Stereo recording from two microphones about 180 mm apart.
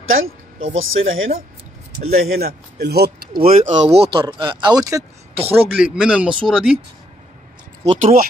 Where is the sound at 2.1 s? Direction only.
60° right (ahead or behind).